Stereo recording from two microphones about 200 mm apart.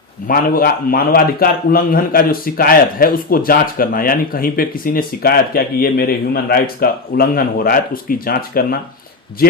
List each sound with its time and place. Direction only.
0.3 s a man's voice: 45° left (ahead or behind)